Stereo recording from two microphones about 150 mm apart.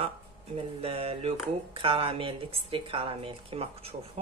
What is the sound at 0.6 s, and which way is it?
Speech, 40° right (ahead or behind).